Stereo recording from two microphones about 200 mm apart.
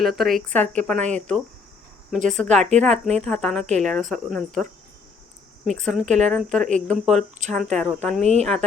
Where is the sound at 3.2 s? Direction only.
Centre (ahead or behind).